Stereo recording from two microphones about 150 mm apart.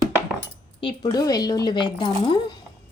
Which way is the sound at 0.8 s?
30° left (ahead or behind).